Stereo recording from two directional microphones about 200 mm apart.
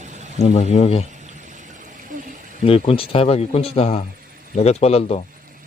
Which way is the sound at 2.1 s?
40° right (ahead or behind).